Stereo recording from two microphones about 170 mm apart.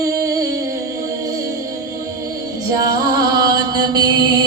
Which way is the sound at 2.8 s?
25° right (ahead or behind).